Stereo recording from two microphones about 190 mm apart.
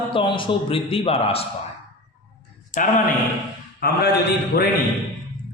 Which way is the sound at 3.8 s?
55° left (ahead or behind).